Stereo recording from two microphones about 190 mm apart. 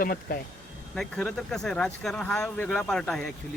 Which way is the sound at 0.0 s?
50° left (ahead or behind).